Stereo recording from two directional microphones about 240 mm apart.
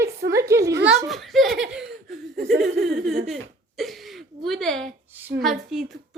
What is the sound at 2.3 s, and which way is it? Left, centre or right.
Laughter, right.